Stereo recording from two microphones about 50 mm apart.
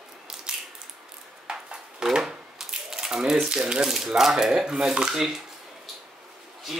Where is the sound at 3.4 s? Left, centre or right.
Centre.